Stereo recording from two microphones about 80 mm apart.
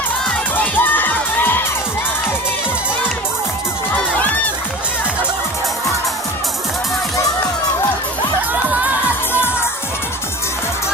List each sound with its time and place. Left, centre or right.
0.5 s music: left